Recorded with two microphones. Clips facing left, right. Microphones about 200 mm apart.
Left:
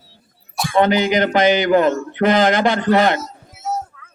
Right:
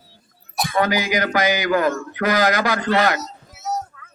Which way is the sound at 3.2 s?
50° left (ahead or behind).